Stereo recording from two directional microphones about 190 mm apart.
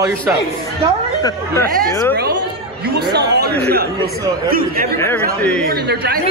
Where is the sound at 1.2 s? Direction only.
15° left (ahead or behind).